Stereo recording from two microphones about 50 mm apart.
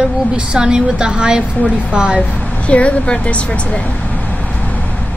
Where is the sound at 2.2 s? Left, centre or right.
Left.